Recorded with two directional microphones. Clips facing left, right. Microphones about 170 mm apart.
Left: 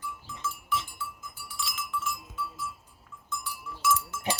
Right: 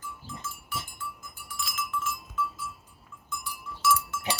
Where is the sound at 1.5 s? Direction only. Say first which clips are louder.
Even; 50° right (ahead or behind).